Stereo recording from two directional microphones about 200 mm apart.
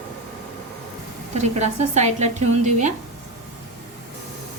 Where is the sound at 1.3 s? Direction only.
35° right (ahead or behind).